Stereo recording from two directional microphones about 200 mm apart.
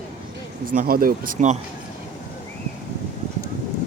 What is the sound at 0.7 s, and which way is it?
Speech, 45° right (ahead or behind).